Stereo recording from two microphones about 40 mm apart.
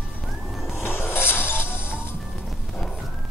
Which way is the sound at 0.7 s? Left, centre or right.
Left.